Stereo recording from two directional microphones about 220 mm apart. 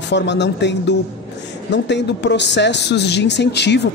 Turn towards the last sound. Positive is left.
turn(degrees=50)  # may be behind; listen again after turning